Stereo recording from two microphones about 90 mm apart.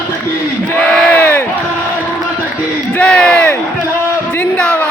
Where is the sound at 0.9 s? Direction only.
15° left (ahead or behind).